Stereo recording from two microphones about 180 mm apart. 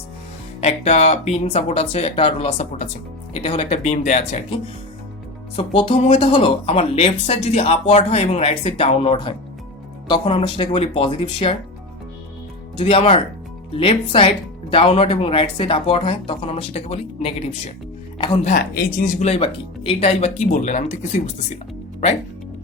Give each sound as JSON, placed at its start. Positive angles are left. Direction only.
{"t": 0.6, "sound": "speech", "side_deg": 35}
{"t": 5.5, "sound": "speech", "side_deg": 30}
{"t": 12.7, "sound": "speech", "side_deg": 30}
{"t": 18.5, "sound": "speech", "side_deg": 55}